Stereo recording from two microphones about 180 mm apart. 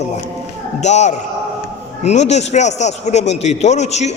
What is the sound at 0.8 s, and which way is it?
A man's voice, 40° left (ahead or behind).